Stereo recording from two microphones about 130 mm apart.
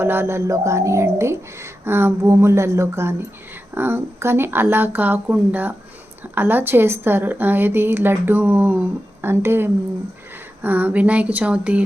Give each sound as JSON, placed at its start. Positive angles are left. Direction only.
{"t": 0.0, "sound": "a woman's voice", "side_deg": -20}